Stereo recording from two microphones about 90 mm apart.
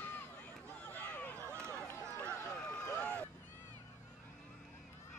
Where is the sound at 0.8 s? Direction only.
20° left (ahead or behind).